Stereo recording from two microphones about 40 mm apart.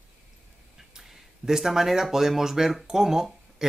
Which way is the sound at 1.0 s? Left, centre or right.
Centre.